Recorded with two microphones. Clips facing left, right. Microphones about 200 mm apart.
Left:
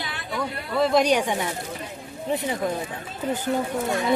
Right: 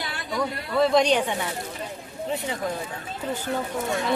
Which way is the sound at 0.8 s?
Centre (ahead or behind).